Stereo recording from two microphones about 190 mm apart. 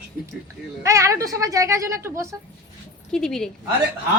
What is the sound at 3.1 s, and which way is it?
Speech, 5° left (ahead or behind).